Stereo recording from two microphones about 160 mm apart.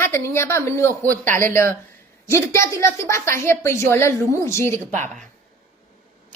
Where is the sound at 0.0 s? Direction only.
15° left (ahead or behind).